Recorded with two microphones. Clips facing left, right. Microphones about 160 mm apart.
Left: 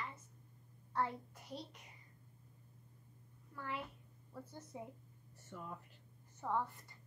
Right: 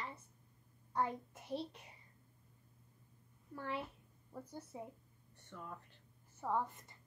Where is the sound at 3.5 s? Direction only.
30° right (ahead or behind).